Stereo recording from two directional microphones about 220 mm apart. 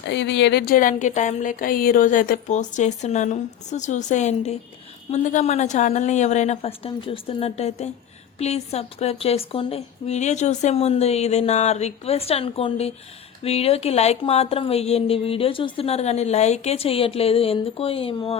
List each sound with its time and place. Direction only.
0.0 s a woman's voice: 50° left (ahead or behind); by 18.3 s 25° left (ahead or behind)